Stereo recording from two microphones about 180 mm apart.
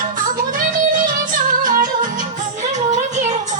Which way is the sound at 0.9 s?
50° right (ahead or behind).